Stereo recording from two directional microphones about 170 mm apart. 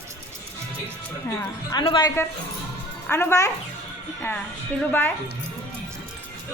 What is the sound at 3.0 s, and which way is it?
Speech, 15° left (ahead or behind).